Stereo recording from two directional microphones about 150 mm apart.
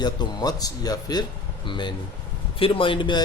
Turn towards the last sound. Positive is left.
turn(degrees=30)  # may be behind; listen again after turning